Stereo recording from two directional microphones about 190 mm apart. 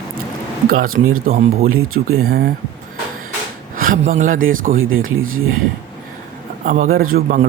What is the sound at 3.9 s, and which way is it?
Speech, 40° right (ahead or behind).